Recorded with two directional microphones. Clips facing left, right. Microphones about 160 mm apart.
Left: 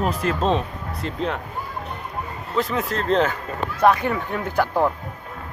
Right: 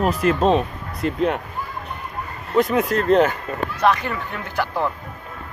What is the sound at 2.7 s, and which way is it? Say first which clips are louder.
Speech: right 4 dB; 55° right (ahead or behind).